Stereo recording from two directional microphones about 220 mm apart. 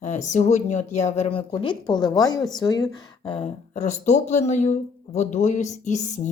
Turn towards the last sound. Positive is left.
turn(degrees=35)  # may be behind; listen again after turning